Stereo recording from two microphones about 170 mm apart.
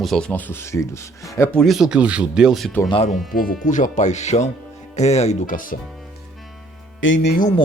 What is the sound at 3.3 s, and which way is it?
Speech, 60° left (ahead or behind).